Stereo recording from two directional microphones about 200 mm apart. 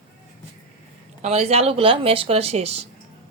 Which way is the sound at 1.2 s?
30° right (ahead or behind).